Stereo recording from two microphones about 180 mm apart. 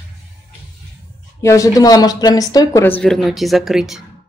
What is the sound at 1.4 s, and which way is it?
Speech, 15° left (ahead or behind).